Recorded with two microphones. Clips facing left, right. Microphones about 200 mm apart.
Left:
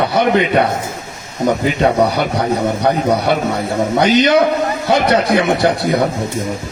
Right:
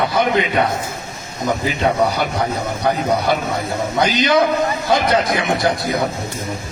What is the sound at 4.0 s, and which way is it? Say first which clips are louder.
Speech: left 4 dB; 70° left (ahead or behind).